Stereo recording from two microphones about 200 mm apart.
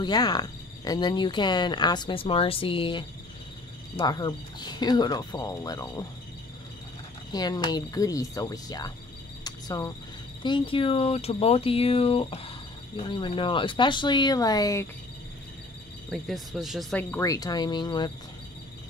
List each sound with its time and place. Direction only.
0.0 s speech: 20° left (ahead or behind)
7.3 s speech: 20° left (ahead or behind)
9.4 s cricket: 20° left (ahead or behind)
10.4 s speech: 25° left (ahead or behind)
16.1 s speech: centre (ahead or behind)
17.1 s speech: 15° left (ahead or behind)